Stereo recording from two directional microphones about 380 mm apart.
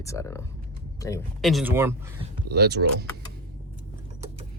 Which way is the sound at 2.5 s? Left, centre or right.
Right.